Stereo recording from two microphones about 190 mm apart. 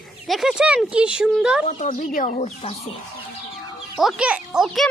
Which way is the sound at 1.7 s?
45° left (ahead or behind).